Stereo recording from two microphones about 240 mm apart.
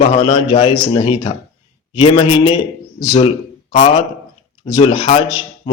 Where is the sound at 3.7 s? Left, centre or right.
Left.